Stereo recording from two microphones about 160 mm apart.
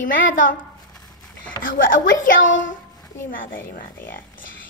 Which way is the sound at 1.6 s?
60° left (ahead or behind).